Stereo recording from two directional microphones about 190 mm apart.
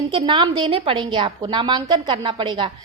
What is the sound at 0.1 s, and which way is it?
A woman's voice, 25° right (ahead or behind).